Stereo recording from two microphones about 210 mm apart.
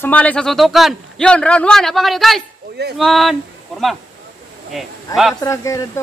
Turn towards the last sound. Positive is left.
turn(degrees=15)  # may be behind; listen again after turning